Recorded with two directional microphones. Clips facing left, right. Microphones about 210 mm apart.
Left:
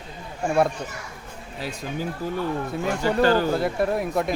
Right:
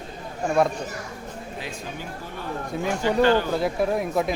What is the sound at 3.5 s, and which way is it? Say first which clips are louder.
Speech: even; centre (ahead or behind).